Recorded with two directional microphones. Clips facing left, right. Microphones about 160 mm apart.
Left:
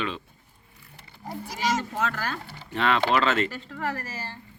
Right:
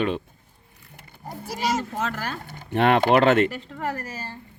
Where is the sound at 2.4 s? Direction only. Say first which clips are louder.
Right 7 dB; 50° right (ahead or behind).